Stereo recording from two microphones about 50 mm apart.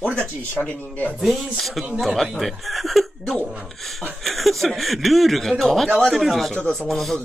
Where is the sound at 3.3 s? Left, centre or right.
Right.